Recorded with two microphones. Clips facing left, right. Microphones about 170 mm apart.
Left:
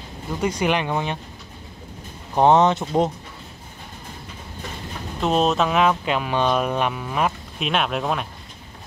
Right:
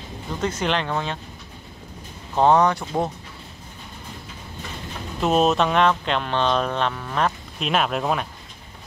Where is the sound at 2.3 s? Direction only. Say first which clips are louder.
Left 1 dB; 20° left (ahead or behind).